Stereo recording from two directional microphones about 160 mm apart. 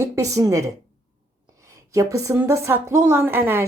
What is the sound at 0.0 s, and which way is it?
Speech, 20° right (ahead or behind).